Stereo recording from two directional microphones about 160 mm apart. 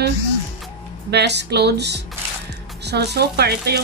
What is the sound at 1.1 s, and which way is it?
Speech, 90° right.